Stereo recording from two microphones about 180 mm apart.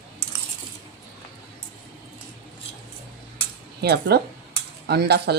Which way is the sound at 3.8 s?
65° right (ahead or behind).